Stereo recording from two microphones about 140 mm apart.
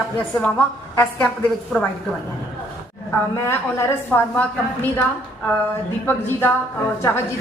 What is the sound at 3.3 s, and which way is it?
A woman's voice, 20° left (ahead or behind).